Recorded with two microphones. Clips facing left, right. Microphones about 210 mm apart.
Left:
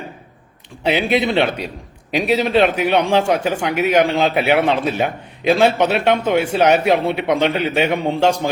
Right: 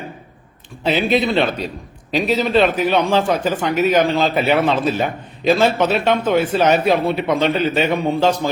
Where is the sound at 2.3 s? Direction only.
15° left (ahead or behind).